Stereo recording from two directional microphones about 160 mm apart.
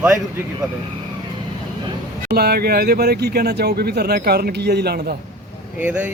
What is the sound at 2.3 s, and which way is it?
Speech, 75° right (ahead or behind).